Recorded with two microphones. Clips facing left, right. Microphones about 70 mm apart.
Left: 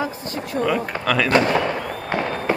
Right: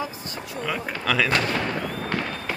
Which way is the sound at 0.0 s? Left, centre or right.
Left.